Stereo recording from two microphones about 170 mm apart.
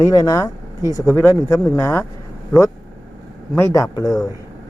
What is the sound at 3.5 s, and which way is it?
Speech, 15° left (ahead or behind).